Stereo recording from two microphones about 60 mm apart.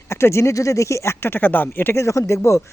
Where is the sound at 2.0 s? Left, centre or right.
Left.